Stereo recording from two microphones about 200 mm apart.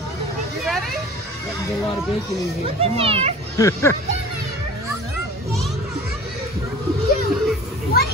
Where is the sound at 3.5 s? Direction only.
15° left (ahead or behind).